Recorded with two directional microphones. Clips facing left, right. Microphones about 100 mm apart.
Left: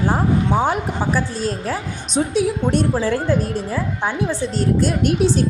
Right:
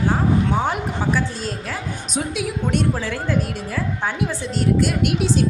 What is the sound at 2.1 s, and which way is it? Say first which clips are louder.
A woman's voice: left 7 dB; 30° left (ahead or behind).